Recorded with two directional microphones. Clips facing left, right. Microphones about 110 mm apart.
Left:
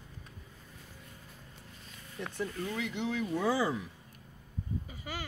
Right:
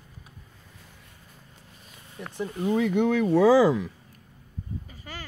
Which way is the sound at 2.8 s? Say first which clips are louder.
Right 12 dB; 50° right (ahead or behind).